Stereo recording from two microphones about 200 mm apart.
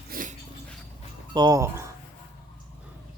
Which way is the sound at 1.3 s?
20° right (ahead or behind).